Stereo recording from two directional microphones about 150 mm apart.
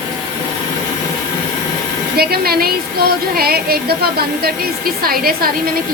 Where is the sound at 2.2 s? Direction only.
90° right.